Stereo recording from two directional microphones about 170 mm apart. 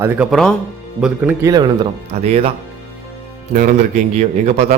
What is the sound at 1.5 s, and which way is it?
Speech, 25° right (ahead or behind).